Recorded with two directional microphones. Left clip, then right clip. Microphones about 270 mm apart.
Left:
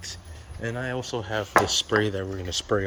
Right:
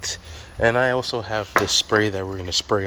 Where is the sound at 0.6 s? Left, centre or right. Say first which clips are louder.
Right 12 dB; centre.